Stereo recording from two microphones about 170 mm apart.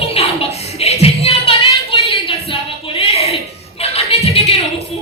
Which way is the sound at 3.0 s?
35° left (ahead or behind).